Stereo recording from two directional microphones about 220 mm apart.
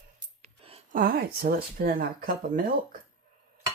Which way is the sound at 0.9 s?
45° right (ahead or behind).